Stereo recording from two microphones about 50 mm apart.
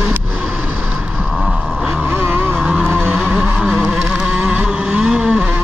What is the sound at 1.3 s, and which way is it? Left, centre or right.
Boat, right.